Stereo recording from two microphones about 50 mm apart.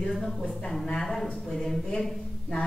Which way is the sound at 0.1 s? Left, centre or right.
Centre.